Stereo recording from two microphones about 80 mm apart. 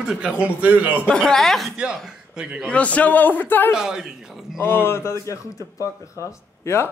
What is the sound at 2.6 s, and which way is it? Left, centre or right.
A man's voice, centre.